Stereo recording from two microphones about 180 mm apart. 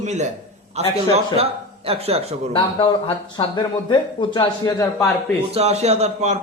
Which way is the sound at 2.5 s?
30° left (ahead or behind).